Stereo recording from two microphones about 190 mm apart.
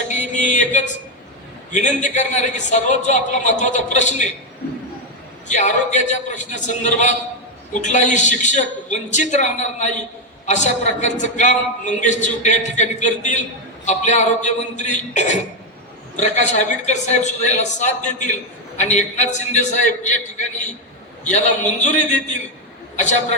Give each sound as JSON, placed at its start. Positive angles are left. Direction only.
{"t": 0.1, "sound": "music", "side_deg": 40}
{"t": 1.7, "sound": "a man's voice", "side_deg": 40}
{"t": 5.5, "sound": "a man's voice", "side_deg": 40}
{"t": 21.2, "sound": "a man's voice", "side_deg": 40}